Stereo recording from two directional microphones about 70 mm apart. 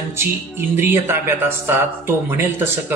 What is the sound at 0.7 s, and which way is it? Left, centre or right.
Speech, right.